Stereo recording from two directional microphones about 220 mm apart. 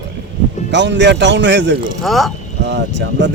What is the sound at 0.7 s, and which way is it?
Speech, 55° right (ahead or behind).